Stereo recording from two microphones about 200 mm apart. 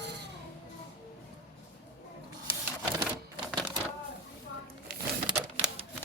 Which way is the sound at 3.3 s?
25° right (ahead or behind).